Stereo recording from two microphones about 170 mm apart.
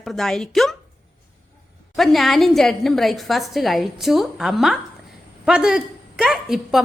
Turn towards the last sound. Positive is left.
turn(degrees=0)  # may be behind; listen again after turning